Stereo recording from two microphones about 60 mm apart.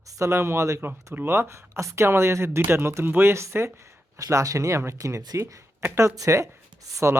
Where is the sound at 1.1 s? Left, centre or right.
Right.